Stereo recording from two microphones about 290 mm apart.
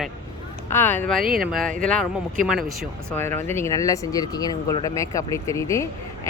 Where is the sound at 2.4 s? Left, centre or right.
Right.